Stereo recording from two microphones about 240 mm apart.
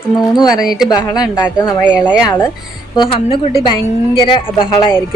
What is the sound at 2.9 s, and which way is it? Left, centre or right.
Speech, centre.